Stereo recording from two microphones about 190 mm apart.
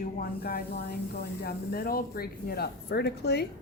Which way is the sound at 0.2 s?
50° left (ahead or behind).